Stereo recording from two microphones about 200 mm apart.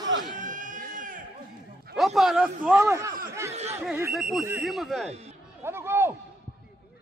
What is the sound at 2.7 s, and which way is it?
A man's voice, 15° right (ahead or behind).